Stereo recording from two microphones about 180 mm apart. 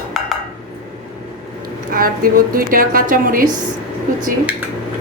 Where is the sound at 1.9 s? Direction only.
50° right (ahead or behind).